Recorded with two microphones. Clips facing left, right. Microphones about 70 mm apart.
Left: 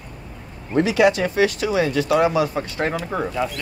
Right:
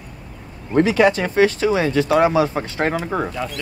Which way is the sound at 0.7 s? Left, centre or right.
Right.